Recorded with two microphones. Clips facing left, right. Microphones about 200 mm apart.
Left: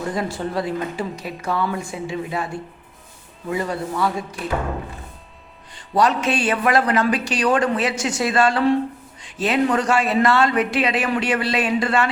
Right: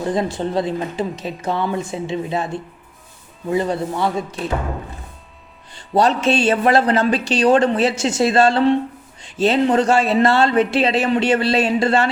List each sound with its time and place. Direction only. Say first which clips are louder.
0.0 s speech: right 4 dB; 25° right (ahead or behind)
5.9 s speech: right 3 dB; 30° right (ahead or behind)